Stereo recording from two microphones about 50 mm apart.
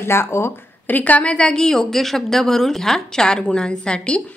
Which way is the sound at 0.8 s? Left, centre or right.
Left.